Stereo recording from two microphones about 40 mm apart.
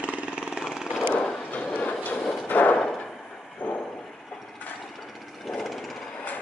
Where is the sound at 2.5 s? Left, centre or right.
Left.